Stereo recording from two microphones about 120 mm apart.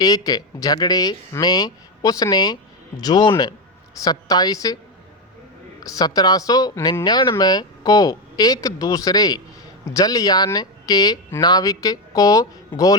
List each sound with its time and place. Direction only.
0.0 s speech: 30° left (ahead or behind)
5.8 s speech: 30° left (ahead or behind)